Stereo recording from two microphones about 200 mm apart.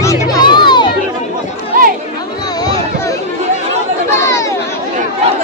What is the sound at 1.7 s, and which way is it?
Chatter, 45° right (ahead or behind).